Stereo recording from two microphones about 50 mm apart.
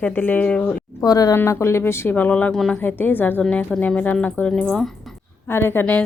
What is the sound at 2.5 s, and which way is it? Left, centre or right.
Speech, centre.